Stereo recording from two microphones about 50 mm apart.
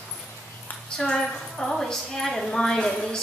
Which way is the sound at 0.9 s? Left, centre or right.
Centre.